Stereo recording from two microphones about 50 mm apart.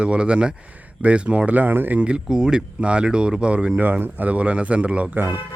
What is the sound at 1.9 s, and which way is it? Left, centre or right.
Speech, right.